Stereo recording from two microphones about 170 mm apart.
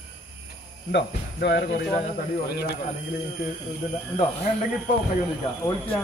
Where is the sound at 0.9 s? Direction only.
80° left; by 2.6 s 65° left (ahead or behind).